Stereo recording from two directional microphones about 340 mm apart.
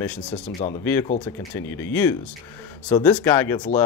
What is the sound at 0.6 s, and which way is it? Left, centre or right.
Speech, centre.